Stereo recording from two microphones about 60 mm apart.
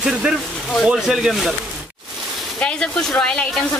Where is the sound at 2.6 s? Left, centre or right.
Centre.